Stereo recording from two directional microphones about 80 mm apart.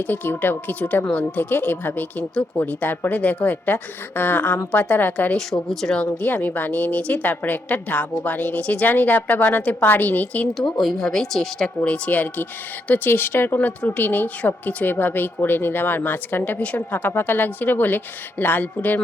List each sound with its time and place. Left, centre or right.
0.0 s speech: left
5.5 s speech: centre
6.1 s speech: centre
10.7 s speech: centre
11.8 s speech: centre